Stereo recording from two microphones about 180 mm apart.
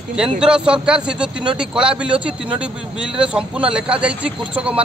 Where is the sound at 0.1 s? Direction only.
5° right (ahead or behind).